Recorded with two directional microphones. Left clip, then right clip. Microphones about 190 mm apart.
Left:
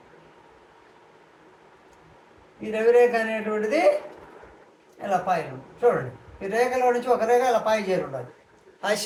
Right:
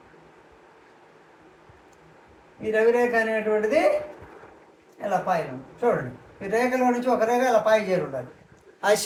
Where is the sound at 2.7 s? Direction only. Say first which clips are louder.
Left 2 dB; 10° right (ahead or behind).